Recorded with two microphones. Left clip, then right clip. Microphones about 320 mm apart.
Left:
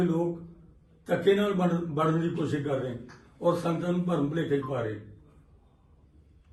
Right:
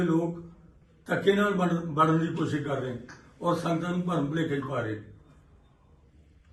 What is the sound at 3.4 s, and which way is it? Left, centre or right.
A man's voice, centre.